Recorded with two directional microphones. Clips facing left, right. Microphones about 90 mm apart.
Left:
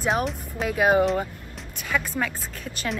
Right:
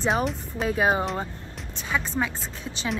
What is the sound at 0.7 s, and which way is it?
Speech, 25° right (ahead or behind).